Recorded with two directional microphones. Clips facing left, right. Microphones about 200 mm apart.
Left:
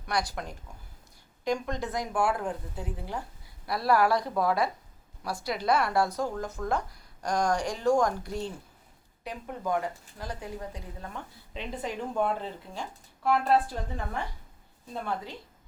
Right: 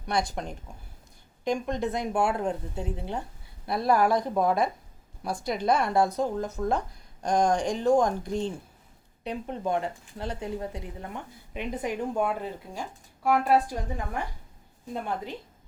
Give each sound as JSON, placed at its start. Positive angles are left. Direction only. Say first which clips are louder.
{"t": 0.0, "sound": "a woman's voice", "louder": "right 3 dB", "side_deg": -25}